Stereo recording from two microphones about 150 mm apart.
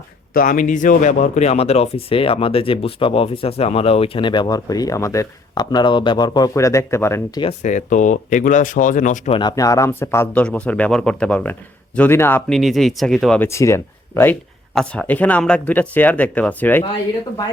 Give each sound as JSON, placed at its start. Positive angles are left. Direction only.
{"t": 0.3, "sound": "speech", "side_deg": 60}
{"t": 7.6, "sound": "speech", "side_deg": 55}
{"t": 9.3, "sound": "speech", "side_deg": 30}
{"t": 12.5, "sound": "speech", "side_deg": 0}
{"t": 13.4, "sound": "speech", "side_deg": 20}